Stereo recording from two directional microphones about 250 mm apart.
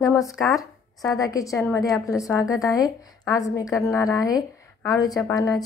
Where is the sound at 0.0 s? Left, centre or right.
Centre.